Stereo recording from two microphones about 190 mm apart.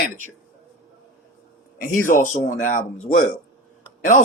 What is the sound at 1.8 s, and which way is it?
Speech, 45° left (ahead or behind).